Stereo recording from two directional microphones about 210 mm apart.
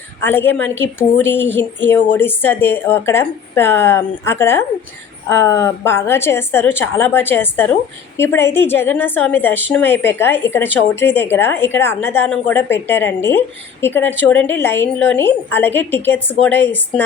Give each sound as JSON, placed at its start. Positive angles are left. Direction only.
{"t": 0.2, "sound": "a woman's voice", "side_deg": 10}